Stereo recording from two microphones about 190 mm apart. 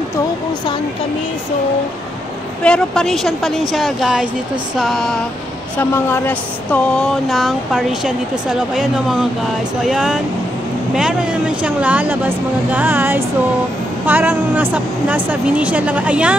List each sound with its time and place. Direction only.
2.6 s a woman's voice: 5° left (ahead or behind)